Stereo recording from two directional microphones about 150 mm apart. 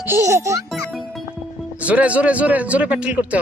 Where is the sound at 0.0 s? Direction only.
15° right (ahead or behind).